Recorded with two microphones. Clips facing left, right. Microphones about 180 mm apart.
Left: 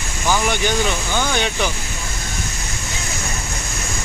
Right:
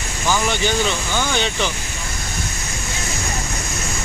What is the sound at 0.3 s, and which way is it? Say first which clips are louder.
Speech: left 1 dB; 15° left (ahead or behind).